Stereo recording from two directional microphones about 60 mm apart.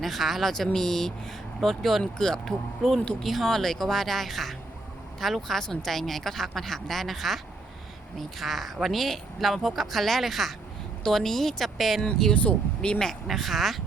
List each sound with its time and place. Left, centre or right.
0.0 s speech: centre
12.3 s speech: centre
13.2 s speech: centre